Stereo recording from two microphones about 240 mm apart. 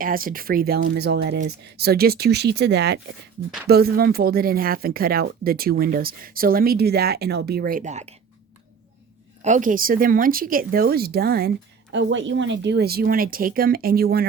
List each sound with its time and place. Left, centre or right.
0.0 s speech: right
9.4 s speech: right